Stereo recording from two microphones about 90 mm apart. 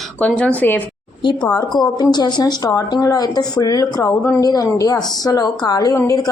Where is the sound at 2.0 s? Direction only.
50° left (ahead or behind).